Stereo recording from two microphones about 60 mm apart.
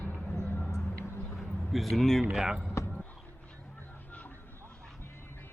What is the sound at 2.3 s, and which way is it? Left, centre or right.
Speech, centre.